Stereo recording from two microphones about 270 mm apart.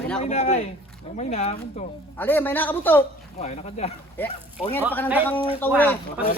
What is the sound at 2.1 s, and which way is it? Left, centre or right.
Speech, centre.